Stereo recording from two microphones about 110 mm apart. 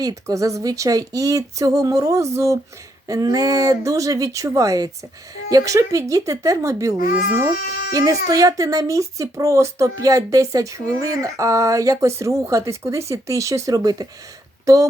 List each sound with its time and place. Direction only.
0.0 s speech: 30° right (ahead or behind)
7.9 s speech: 30° right (ahead or behind)